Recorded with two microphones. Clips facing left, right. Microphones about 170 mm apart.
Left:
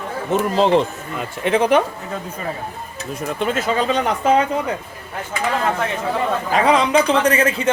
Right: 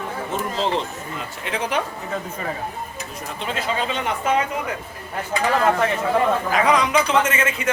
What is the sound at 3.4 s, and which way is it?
Speech, 45° left (ahead or behind).